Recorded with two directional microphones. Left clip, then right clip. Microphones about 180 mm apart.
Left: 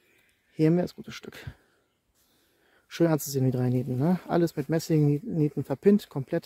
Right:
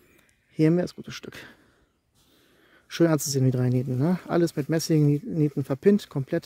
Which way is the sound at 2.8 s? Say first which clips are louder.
Right 3 dB; 20° right (ahead or behind).